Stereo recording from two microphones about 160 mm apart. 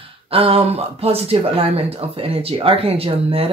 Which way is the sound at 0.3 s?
35° right (ahead or behind).